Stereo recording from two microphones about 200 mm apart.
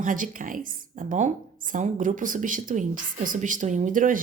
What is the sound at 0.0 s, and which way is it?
A woman's voice, 40° right (ahead or behind).